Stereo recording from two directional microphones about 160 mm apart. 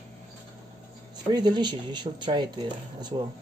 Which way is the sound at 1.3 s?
25° right (ahead or behind).